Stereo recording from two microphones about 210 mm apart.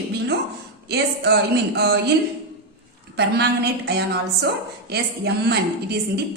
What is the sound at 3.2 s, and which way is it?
A woman's voice, 50° right (ahead or behind).